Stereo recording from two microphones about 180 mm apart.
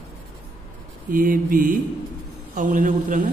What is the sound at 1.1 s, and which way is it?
Speech, 50° right (ahead or behind).